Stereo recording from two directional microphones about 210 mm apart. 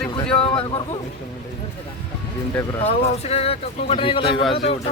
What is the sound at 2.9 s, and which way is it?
A man's voice, 30° left (ahead or behind).